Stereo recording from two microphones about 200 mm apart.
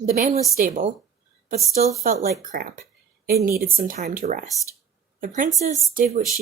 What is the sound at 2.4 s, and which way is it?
A woman's voice, 45° right (ahead or behind).